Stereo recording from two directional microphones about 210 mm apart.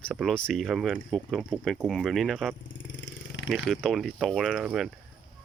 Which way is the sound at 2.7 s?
65° left (ahead or behind).